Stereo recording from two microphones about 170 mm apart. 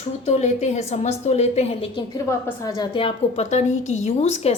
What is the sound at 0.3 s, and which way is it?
A woman's voice, 40° left (ahead or behind).